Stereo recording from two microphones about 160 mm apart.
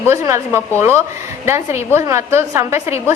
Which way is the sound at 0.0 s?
15° right (ahead or behind).